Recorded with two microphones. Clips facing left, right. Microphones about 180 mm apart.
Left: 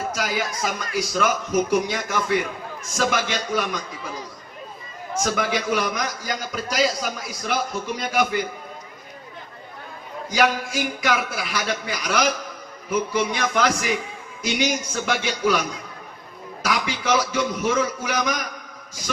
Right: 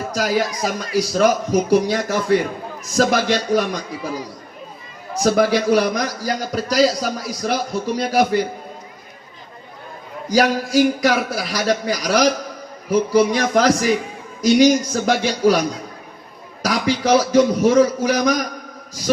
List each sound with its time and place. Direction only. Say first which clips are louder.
0.1 s a man's voice: right 6 dB; 35° right (ahead or behind)
5.2 s a man's voice: right 9 dB; 35° right (ahead or behind)
10.2 s a man's voice: right 4 dB; 35° right (ahead or behind)